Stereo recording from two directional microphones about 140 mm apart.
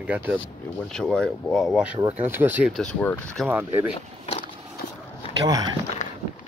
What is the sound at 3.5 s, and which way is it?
Speech, 15° right (ahead or behind).